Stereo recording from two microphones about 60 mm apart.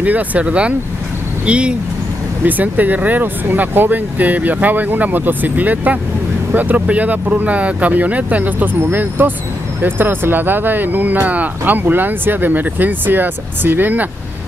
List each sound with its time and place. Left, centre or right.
0.0 s speech: right
2.4 s speech: right